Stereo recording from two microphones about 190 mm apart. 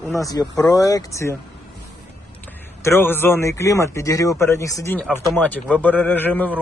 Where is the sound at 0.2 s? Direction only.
20° left (ahead or behind).